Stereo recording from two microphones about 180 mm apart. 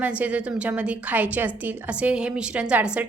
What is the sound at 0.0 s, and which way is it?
A woman's voice, 10° right (ahead or behind).